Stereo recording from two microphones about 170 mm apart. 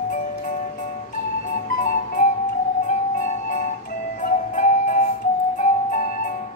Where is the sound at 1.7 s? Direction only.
55° left (ahead or behind).